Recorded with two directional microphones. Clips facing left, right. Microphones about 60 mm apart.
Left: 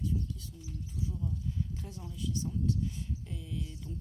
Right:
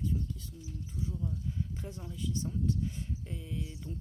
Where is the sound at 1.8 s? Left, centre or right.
Right.